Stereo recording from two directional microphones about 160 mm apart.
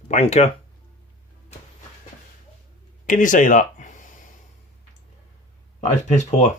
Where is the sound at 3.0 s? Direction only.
55° left (ahead or behind).